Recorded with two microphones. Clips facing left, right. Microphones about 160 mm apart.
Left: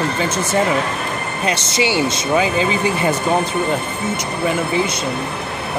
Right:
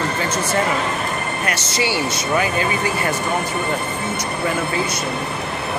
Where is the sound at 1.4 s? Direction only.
20° left (ahead or behind).